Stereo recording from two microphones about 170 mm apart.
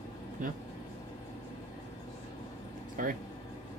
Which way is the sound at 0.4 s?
50° right (ahead or behind).